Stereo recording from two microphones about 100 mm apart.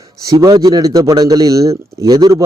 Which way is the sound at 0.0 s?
35° right (ahead or behind).